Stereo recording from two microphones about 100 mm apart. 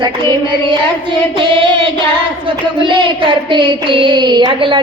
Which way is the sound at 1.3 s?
55° right (ahead or behind).